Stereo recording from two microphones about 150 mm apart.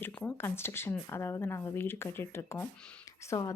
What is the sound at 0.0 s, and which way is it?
Speech, 10° left (ahead or behind).